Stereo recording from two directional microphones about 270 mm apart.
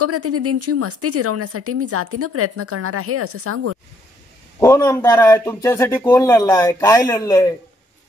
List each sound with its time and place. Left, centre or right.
0.0 s speech: right
4.6 s a man's voice: centre